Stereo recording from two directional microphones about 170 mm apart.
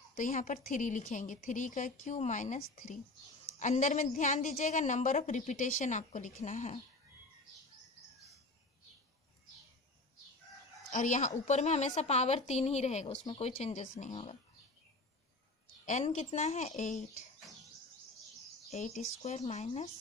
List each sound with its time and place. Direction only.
0.1 s a woman's voice: 50° left (ahead or behind)
10.9 s a woman's voice: 50° left (ahead or behind)
15.8 s a woman's voice: 45° left (ahead or behind)
18.7 s a woman's voice: 40° left (ahead or behind)